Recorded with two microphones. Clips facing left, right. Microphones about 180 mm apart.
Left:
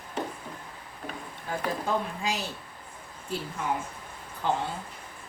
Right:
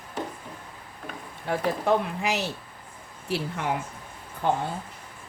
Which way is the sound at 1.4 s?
75° right (ahead or behind).